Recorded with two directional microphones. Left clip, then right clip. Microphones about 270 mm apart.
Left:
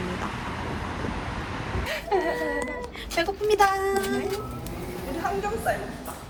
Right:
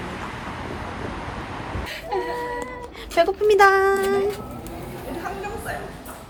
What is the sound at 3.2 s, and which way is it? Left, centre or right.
Speech, right.